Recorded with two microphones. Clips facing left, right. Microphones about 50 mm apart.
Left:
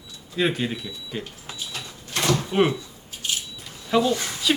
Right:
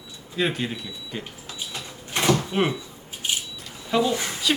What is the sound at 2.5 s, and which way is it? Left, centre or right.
Speech, centre.